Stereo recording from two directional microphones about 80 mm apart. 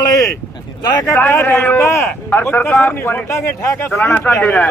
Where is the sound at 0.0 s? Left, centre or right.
Left.